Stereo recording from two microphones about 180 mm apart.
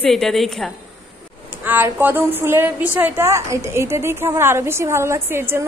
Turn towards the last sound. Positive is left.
turn(degrees=-15)  # may be behind; listen again after turning